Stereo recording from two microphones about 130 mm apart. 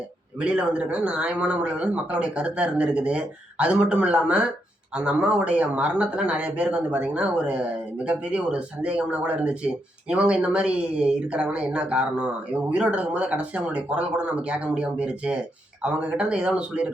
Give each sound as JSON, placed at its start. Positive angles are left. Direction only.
{"t": 0.3, "sound": "speech", "side_deg": -10}